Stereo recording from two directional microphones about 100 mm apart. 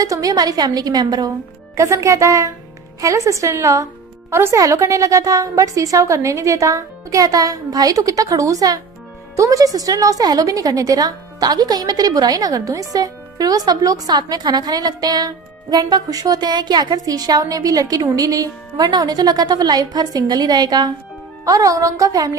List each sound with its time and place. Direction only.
0.0 s speech: 35° right (ahead or behind)